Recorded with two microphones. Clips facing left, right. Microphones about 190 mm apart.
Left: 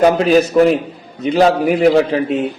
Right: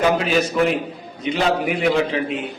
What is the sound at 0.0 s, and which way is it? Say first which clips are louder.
A man's voice: left 7 dB; 40° left (ahead or behind).